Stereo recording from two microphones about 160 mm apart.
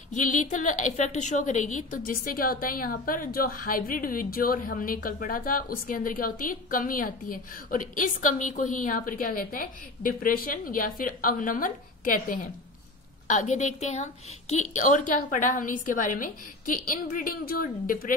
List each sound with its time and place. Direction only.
0.1 s a woman's voice: 55° left (ahead or behind)